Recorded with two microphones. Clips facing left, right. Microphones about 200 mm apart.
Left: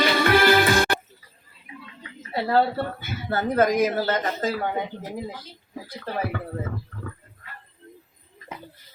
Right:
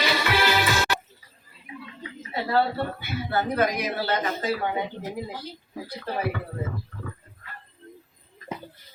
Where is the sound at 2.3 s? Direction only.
45° left (ahead or behind).